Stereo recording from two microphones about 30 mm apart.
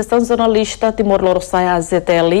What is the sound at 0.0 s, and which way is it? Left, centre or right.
A woman's voice, right.